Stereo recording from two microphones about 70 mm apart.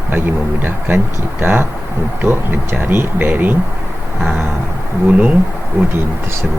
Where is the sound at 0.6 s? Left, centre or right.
Right.